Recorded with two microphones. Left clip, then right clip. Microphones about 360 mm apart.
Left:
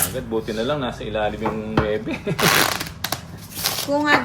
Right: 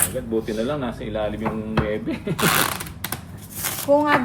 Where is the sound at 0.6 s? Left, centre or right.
Left.